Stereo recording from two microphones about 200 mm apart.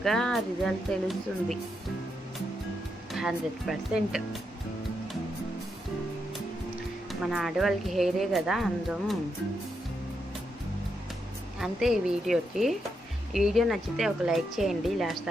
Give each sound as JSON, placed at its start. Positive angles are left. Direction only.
{"t": 0.0, "sound": "speech", "side_deg": 0}
{"t": 3.1, "sound": "speech", "side_deg": 0}
{"t": 7.1, "sound": "speech", "side_deg": 0}
{"t": 11.6, "sound": "speech", "side_deg": 0}